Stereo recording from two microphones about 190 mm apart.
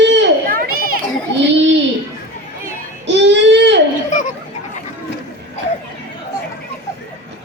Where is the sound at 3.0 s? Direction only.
65° right (ahead or behind).